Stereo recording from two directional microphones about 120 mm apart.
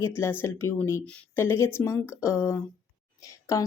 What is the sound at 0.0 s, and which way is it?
Speech, 20° left (ahead or behind).